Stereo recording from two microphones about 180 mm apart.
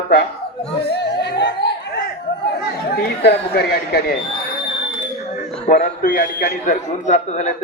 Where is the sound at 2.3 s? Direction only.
60° left (ahead or behind).